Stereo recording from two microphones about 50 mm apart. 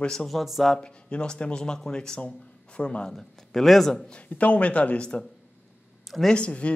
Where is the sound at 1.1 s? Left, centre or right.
Centre.